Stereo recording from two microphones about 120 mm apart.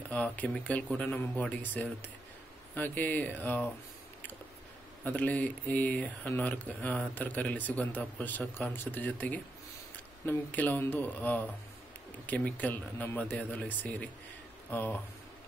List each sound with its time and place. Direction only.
0.1 s speech: 15° left (ahead or behind)
5.0 s speech: 15° left (ahead or behind)